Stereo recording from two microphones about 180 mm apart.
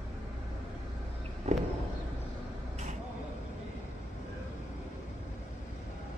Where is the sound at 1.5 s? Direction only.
35° right (ahead or behind).